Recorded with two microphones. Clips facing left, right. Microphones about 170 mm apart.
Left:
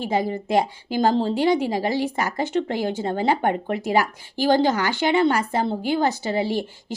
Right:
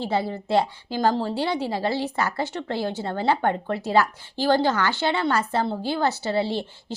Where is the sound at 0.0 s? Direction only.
15° left (ahead or behind).